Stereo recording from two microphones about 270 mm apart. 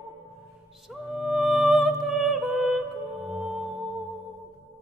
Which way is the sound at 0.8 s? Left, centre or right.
Centre.